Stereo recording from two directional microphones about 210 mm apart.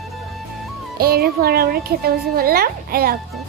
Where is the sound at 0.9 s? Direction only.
45° right (ahead or behind).